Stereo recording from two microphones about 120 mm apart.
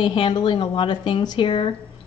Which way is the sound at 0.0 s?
40° left (ahead or behind).